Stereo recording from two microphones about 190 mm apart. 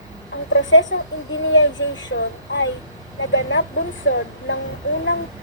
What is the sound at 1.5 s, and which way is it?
Speech, 90° left.